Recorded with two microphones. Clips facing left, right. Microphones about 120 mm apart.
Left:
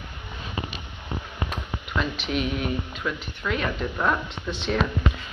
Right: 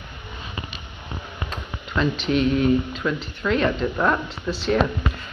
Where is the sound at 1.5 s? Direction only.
10° left (ahead or behind).